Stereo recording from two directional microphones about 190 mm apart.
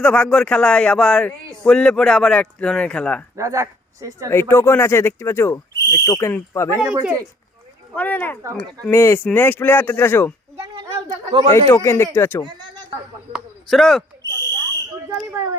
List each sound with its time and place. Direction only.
0.0 s speech: 5° left (ahead or behind)
3.3 s speech: 15° right (ahead or behind)
4.3 s speech: 15° left (ahead or behind)
6.8 s speech: 5° right (ahead or behind)
7.9 s speech: 10° left (ahead or behind)
11.3 s speech: 25° right (ahead or behind)
11.7 s speech: 15° left (ahead or behind)
13.3 s a sound: centre (ahead or behind)
14.2 s owl: 20° right (ahead or behind)